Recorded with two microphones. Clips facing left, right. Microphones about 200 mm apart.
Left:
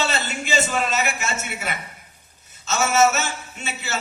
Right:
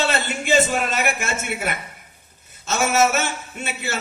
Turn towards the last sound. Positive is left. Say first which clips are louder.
# right 2 dB
turn(degrees=-55)  # may be behind; listen again after turning